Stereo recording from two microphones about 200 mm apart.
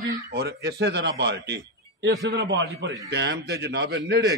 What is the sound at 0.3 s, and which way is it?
A man's voice, 55° right (ahead or behind).